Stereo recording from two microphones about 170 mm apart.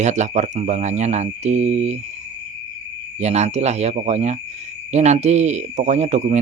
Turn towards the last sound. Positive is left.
turn(degrees=-45)  # may be behind; listen again after turning